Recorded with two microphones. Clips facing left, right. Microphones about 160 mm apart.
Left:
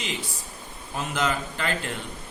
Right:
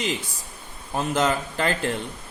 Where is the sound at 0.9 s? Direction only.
40° right (ahead or behind).